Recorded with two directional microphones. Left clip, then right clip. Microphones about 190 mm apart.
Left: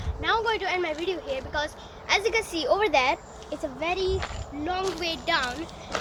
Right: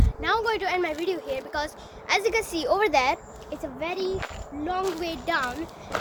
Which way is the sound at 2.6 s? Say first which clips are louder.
Even; 15° right (ahead or behind).